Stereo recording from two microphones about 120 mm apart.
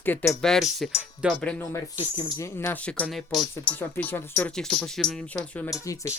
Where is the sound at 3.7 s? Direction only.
15° left (ahead or behind).